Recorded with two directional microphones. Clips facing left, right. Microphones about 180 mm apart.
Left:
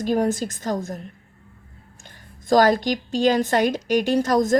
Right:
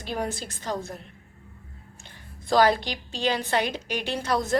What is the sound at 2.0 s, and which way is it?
A woman's voice, 45° left (ahead or behind).